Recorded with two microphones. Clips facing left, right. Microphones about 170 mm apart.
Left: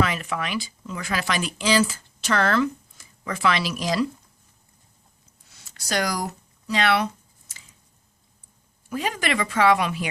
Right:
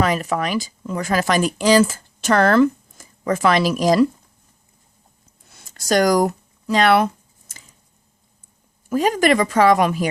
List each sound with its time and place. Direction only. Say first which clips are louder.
0.0 s speech: right 5 dB; 40° right (ahead or behind)
5.5 s speech: right 10 dB; 50° right (ahead or behind)
8.9 s speech: right 10 dB; 45° right (ahead or behind)